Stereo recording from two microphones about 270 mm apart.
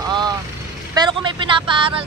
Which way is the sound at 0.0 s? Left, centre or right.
Centre.